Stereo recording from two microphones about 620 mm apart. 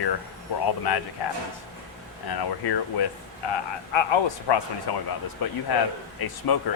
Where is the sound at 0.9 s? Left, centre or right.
Left.